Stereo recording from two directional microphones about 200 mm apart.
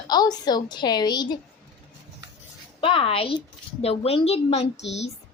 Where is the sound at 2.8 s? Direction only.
25° left (ahead or behind).